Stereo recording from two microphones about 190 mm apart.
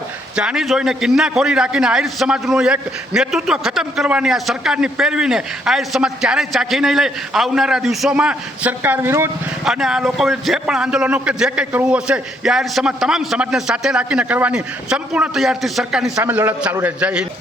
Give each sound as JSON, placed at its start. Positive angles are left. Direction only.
{"t": 0.3, "sound": "a man's voice", "side_deg": -5}